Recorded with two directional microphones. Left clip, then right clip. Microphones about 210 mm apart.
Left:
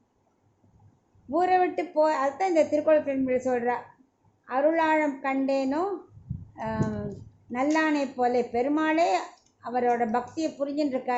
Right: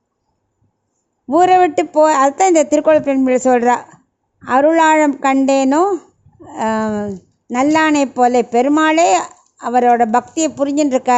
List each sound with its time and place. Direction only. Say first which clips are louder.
1.3 s a woman's voice: right 13 dB; 50° right (ahead or behind)